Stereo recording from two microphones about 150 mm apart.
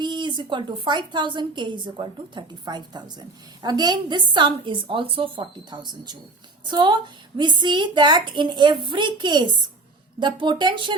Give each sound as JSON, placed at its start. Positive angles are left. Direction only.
{"t": 0.0, "sound": "a woman's voice", "side_deg": -30}